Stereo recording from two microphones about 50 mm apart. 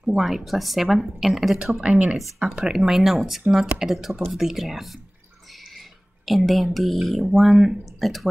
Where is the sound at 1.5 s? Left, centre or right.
Centre.